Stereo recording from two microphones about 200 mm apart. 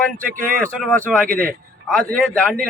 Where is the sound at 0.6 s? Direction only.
5° left (ahead or behind).